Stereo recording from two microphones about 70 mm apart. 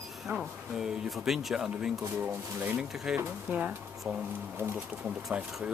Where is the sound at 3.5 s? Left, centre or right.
Right.